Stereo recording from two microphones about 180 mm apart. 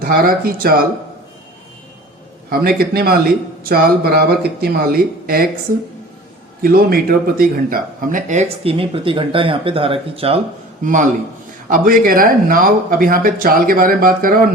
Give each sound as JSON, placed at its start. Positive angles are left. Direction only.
{"t": 0.0, "sound": "speech", "side_deg": -55}
{"t": 2.5, "sound": "speech", "side_deg": -55}
{"t": 6.6, "sound": "speech", "side_deg": -55}
{"t": 10.8, "sound": "speech", "side_deg": -45}